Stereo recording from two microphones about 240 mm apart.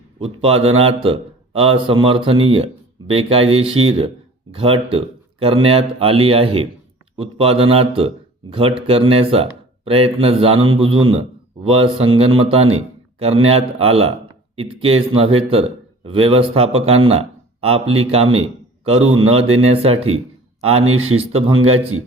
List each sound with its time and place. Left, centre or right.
0.4 s speech: right
12.7 s a sound: right
13.5 s a man's voice: right
19.0 s a man's voice: right
19.7 s speech: right
20.6 s a man's voice: right